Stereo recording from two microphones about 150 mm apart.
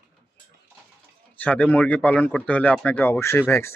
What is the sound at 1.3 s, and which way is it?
Speech, 10° left (ahead or behind).